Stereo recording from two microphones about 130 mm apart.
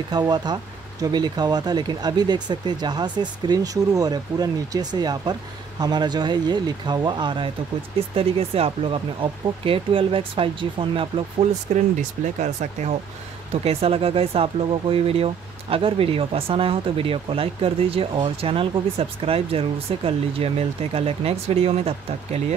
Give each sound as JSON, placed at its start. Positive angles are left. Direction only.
{"t": 0.1, "sound": "speech", "side_deg": -35}
{"t": 11.7, "sound": "speech", "side_deg": -65}
{"t": 13.5, "sound": "speech", "side_deg": -50}